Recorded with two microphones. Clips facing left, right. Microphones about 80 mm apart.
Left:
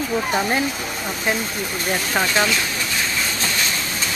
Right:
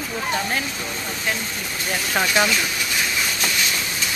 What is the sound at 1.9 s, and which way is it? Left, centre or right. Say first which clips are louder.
Speech: even; centre.